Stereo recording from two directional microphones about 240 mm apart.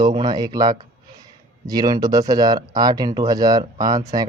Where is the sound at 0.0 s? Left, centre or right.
Centre.